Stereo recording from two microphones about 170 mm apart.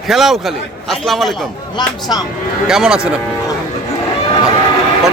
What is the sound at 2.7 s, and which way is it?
Speech, 5° right (ahead or behind).